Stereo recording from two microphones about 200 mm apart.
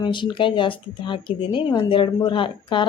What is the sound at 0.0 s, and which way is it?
Speech, 25° left (ahead or behind).